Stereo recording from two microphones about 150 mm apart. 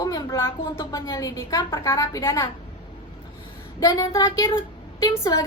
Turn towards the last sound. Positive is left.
turn(degrees=25)  # may be behind; listen again after turning